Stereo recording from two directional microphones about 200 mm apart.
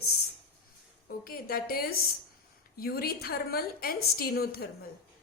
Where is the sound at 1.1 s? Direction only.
50° left (ahead or behind).